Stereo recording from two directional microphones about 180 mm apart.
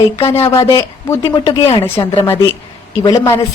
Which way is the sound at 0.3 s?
15° left (ahead or behind).